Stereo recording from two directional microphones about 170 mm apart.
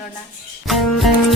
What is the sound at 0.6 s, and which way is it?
Speech, centre (ahead or behind).